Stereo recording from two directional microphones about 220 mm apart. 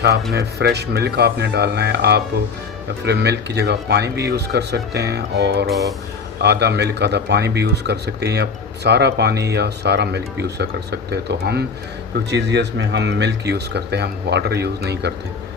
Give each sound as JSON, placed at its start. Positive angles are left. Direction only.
{"t": 0.3, "sound": "speech", "side_deg": -50}